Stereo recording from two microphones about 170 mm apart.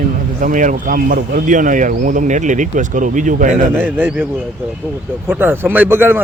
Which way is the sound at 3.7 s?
10° right (ahead or behind).